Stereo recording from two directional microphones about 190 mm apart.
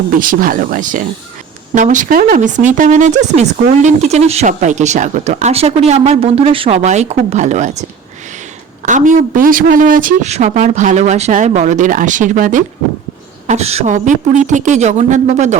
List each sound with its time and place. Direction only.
0.2 s speech: 45° right (ahead or behind)
8.9 s speech: 40° right (ahead or behind)